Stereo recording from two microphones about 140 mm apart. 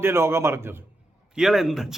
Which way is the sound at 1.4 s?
5° right (ahead or behind).